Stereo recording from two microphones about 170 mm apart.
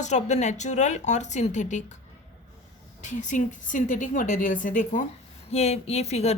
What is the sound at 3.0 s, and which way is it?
A woman's voice, 45° left (ahead or behind).